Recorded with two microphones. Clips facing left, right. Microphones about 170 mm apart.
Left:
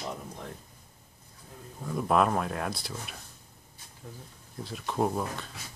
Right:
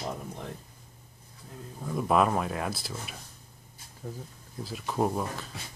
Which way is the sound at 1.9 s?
Centre (ahead or behind).